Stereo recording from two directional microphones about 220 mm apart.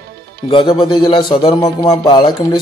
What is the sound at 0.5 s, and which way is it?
A man's voice, 20° left (ahead or behind).